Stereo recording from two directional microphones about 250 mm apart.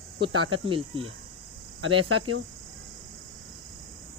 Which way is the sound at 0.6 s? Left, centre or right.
Right.